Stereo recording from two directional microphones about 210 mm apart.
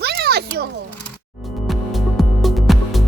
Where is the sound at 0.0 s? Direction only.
50° right (ahead or behind).